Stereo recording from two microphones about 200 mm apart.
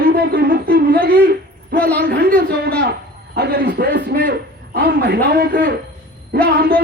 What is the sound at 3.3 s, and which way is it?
A man's voice, 50° right (ahead or behind).